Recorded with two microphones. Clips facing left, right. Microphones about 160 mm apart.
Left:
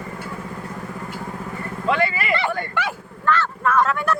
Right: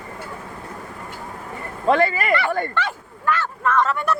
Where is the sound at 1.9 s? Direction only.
45° right (ahead or behind).